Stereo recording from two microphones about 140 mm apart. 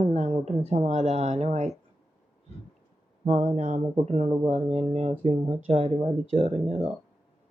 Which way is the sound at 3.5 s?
55° right (ahead or behind).